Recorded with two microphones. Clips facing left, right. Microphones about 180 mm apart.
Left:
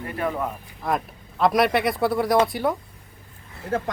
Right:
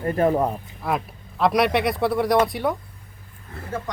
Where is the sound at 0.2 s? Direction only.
35° right (ahead or behind).